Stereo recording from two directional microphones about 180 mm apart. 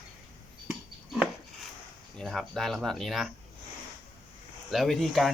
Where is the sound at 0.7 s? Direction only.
Centre (ahead or behind).